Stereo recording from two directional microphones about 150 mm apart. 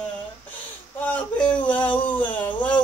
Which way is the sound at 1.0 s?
10° left (ahead or behind).